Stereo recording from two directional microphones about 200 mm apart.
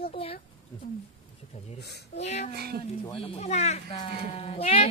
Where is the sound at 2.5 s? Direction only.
55° right (ahead or behind).